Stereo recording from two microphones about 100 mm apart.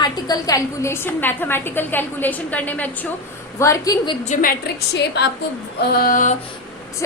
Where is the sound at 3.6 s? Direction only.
35° left (ahead or behind).